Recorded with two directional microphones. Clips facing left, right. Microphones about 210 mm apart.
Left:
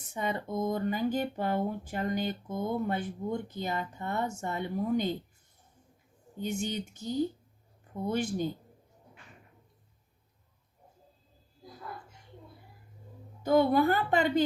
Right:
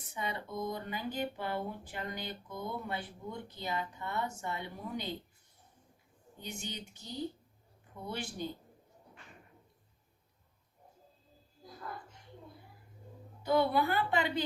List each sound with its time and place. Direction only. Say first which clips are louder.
0.1 s speech: left 6 dB; 45° left (ahead or behind)
6.4 s speech: left 10 dB; 45° left (ahead or behind)
13.4 s speech: left 5 dB; 45° left (ahead or behind)